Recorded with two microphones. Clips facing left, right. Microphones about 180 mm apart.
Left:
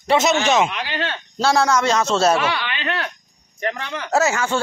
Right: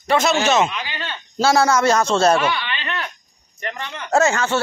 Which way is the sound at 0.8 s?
75° left (ahead or behind).